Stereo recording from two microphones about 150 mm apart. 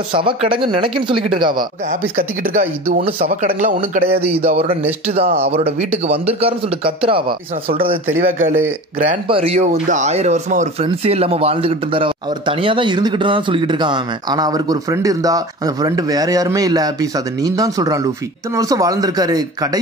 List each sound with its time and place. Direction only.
0.1 s speech: 35° right (ahead or behind)
1.9 s speech: 65° right (ahead or behind)
3.0 s speech: 40° right (ahead or behind)
3.3 s speech: 65° right (ahead or behind)
4.1 s speech: 40° right (ahead or behind)
7.7 s speech: 75° right (ahead or behind)
9.3 s speech: 40° right (ahead or behind)
9.6 s speech: 55° right (ahead or behind); by 19.8 s 25° right (ahead or behind)